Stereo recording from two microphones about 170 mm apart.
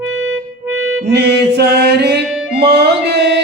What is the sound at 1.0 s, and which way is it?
Music, 75° right (ahead or behind).